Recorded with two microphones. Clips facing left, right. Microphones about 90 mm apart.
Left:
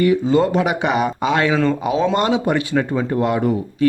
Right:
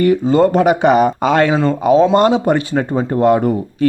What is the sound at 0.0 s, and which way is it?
A woman's voice, 45° right (ahead or behind).